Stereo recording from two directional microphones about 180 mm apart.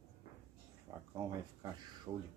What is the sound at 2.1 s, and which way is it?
Speech, 15° right (ahead or behind).